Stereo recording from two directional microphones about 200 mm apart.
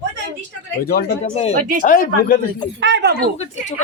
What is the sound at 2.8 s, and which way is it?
Speech, 60° right (ahead or behind).